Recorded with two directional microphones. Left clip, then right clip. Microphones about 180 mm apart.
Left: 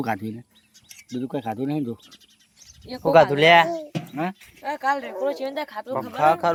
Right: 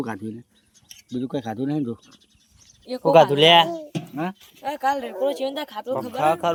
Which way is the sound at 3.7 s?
Centre (ahead or behind).